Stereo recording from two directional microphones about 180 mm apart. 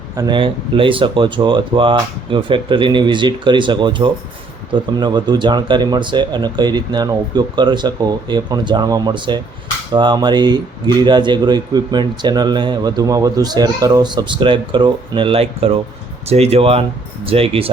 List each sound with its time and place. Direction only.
0.2 s speech: 25° right (ahead or behind)